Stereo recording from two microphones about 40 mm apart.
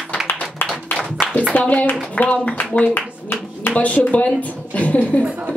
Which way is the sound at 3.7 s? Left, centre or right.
Left.